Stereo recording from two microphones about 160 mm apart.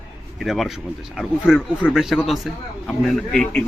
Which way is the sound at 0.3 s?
Centre (ahead or behind).